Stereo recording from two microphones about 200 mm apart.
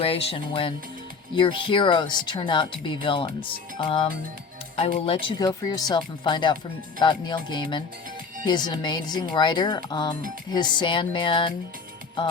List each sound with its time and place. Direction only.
0.0 s speech: 25° left (ahead or behind)